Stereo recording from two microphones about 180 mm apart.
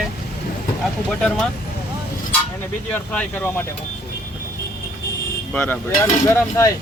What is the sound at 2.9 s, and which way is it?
Speech, 10° left (ahead or behind).